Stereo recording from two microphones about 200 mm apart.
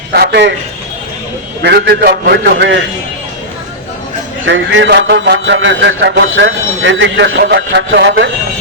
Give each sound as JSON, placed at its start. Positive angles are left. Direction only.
{"t": 0.1, "sound": "a man's voice", "side_deg": -55}
{"t": 1.6, "sound": "speech", "side_deg": -55}
{"t": 4.4, "sound": "speech", "side_deg": -70}